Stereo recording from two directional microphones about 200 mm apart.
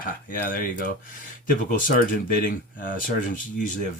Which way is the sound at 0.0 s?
45° left (ahead or behind).